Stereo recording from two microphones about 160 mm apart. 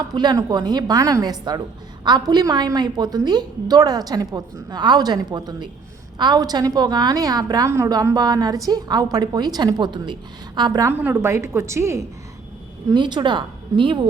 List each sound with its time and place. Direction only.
0.0 s a woman's voice: 25° right (ahead or behind)
12.9 s a woman's voice: 30° right (ahead or behind)